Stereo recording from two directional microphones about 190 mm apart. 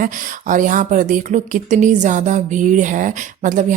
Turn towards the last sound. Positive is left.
turn(degrees=-40)  # may be behind; listen again after turning